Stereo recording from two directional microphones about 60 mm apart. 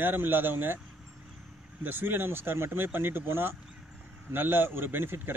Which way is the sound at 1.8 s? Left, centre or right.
Right.